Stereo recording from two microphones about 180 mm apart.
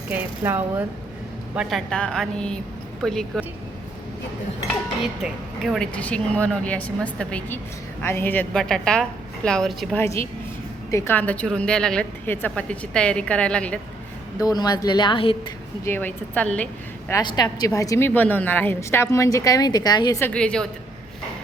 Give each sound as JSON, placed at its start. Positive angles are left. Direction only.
{"t": 0.1, "sound": "speech", "side_deg": -10}
{"t": 1.5, "sound": "a woman's voice", "side_deg": 0}
{"t": 5.2, "sound": "a woman's voice", "side_deg": 0}
{"t": 10.0, "sound": "a woman's voice", "side_deg": 15}
{"t": 14.3, "sound": "a woman's voice", "side_deg": 20}
{"t": 15.8, "sound": "a woman's voice", "side_deg": 10}
{"t": 17.1, "sound": "a woman's voice", "side_deg": 20}